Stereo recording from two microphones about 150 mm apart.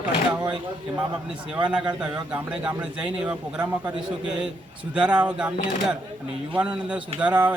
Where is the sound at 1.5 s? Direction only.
5° right (ahead or behind).